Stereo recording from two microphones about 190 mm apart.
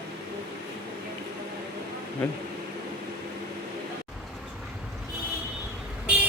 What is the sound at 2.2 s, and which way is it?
Speech, 5° left (ahead or behind).